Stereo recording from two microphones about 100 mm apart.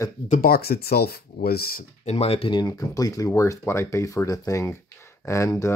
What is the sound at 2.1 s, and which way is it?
Speech, 90° left.